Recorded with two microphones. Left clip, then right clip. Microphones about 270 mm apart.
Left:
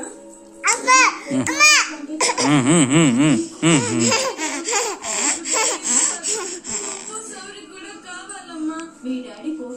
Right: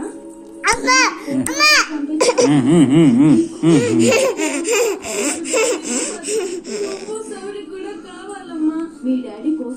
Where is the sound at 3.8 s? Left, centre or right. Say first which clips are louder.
Right 6 dB; centre.